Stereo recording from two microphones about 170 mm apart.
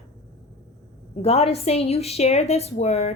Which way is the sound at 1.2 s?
40° left (ahead or behind).